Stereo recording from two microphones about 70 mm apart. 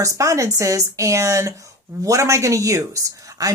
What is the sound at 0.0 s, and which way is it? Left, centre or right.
Speech, right.